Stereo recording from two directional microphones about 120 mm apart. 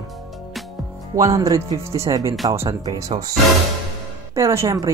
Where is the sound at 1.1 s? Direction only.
25° right (ahead or behind).